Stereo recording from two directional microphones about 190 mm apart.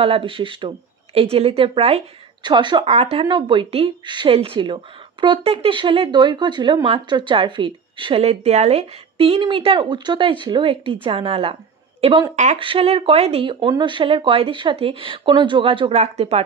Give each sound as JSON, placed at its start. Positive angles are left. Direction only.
{"t": 0.0, "sound": "speech", "side_deg": -30}